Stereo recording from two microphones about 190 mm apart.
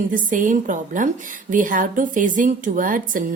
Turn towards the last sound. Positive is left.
turn(degrees=-45)  # may be behind; listen again after turning